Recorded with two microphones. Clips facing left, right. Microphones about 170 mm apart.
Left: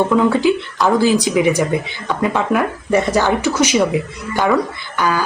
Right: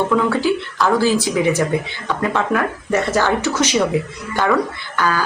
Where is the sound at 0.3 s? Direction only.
15° left (ahead or behind).